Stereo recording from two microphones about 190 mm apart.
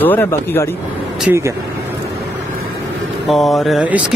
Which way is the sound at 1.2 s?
10° right (ahead or behind).